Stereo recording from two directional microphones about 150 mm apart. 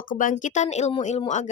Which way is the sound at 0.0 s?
65° left (ahead or behind).